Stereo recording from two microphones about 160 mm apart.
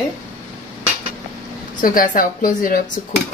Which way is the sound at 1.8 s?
60° left (ahead or behind).